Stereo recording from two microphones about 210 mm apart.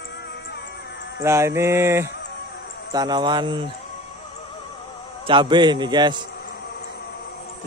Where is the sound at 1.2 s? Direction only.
15° right (ahead or behind).